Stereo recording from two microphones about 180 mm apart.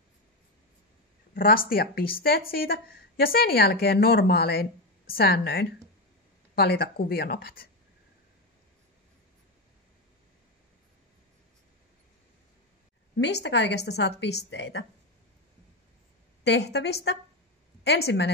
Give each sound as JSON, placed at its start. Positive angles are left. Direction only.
{"t": 1.3, "sound": "a woman's voice", "side_deg": 50}
{"t": 13.2, "sound": "a woman's voice", "side_deg": 75}
{"t": 16.4, "sound": "a woman's voice", "side_deg": 70}